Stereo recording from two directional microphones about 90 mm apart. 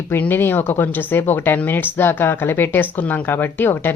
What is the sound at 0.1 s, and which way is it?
Speech, 25° left (ahead or behind).